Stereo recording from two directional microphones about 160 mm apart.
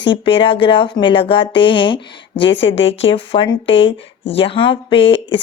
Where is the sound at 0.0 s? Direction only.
30° left (ahead or behind).